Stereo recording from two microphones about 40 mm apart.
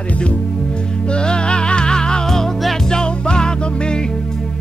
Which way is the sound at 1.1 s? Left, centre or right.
Left.